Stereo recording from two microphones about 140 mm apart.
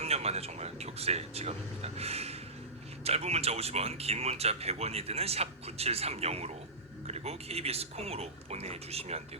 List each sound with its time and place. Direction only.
0.0 s speech: 50° right (ahead or behind)